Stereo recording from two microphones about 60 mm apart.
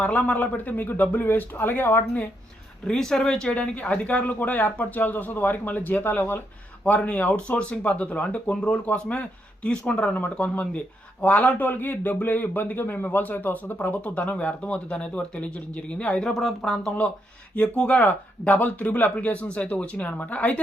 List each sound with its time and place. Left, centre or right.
0.0 s speech: left
2.8 s speech: centre
16.3 s speech: centre
17.5 s speech: left